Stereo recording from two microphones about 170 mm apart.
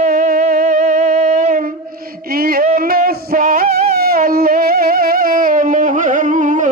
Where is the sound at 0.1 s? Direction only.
55° right (ahead or behind).